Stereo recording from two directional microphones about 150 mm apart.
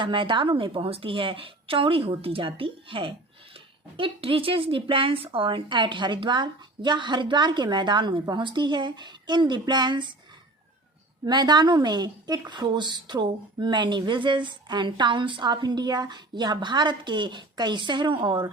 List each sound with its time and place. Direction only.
0.0 s a woman's voice: 35° right (ahead or behind)
11.3 s speech: 30° right (ahead or behind)